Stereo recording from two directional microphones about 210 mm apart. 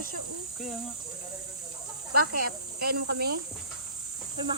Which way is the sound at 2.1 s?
45° right (ahead or behind).